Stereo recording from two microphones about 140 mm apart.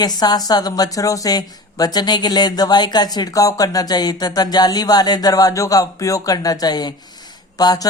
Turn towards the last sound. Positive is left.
turn(degrees=25)  # may be behind; listen again after turning